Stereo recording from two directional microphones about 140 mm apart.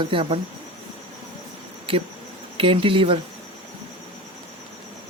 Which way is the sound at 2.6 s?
40° right (ahead or behind).